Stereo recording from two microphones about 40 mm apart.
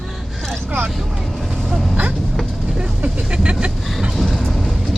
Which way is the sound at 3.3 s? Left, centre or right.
Right.